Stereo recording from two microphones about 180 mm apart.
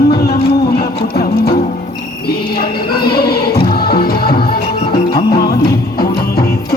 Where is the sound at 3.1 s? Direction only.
60° left (ahead or behind).